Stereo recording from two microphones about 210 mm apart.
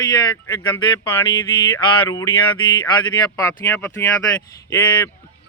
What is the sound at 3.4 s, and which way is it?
Speech, 15° left (ahead or behind).